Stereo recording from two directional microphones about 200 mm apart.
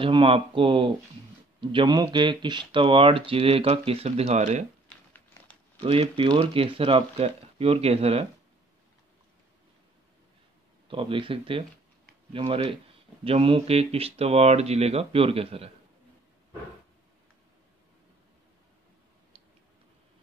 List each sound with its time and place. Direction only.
0.0 s speech: 25° right (ahead or behind)
4.8 s crumpling: 10° left (ahead or behind)
5.8 s speech: 30° right (ahead or behind)
10.9 s speech: 25° right (ahead or behind)